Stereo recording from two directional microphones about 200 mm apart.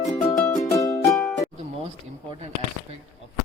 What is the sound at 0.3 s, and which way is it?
Music, 15° left (ahead or behind).